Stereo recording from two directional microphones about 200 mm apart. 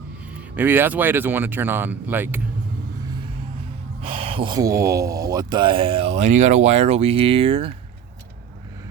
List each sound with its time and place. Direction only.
0.5 s speech: 10° right (ahead or behind)
4.2 s speech: 25° right (ahead or behind)